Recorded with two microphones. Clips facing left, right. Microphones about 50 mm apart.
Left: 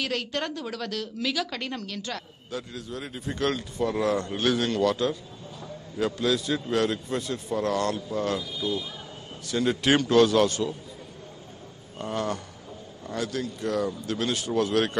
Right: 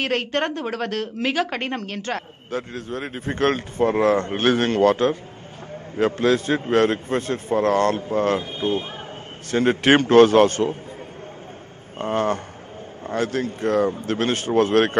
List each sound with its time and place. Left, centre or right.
0.0 s a woman's voice: right
12.0 s a woman's voice: right